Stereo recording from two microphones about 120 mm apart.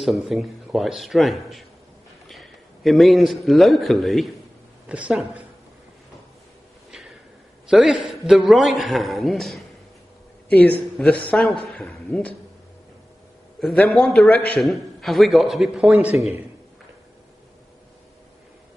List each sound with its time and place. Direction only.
0.0 s a man's voice: centre (ahead or behind)
4.8 s a woman's voice: 10° right (ahead or behind)
7.6 s a man's voice: 5° right (ahead or behind)
11.0 s a man's voice: 5° left (ahead or behind)
13.6 s a man's voice: centre (ahead or behind)